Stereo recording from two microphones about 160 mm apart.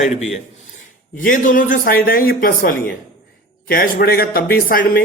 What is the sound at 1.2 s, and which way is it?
A man's voice, 60° left (ahead or behind).